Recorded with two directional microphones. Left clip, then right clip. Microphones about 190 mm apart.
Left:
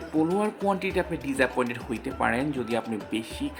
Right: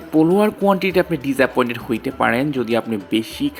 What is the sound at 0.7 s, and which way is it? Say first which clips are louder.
Speech: right 10 dB; 30° right (ahead or behind).